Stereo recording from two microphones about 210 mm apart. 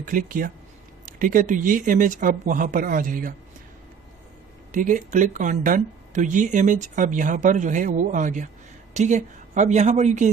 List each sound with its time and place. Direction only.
0.0 s speech: 40° right (ahead or behind)
4.7 s speech: 40° right (ahead or behind)